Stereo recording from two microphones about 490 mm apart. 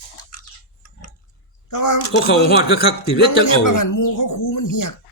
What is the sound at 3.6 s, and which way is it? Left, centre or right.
Speech, left.